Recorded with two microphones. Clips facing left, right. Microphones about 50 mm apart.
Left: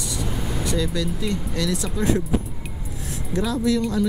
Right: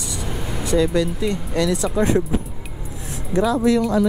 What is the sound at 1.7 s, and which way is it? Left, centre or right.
Speech, right.